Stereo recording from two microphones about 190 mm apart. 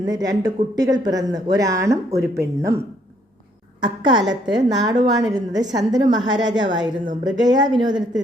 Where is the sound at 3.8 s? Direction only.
25° right (ahead or behind).